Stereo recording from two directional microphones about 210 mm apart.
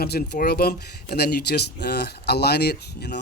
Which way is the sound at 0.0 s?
50° left (ahead or behind).